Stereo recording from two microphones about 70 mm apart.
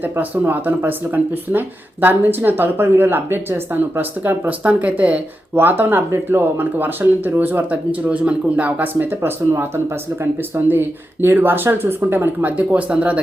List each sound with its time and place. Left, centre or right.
0.4 s speech: right